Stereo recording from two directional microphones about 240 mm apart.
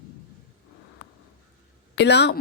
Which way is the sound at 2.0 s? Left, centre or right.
Left.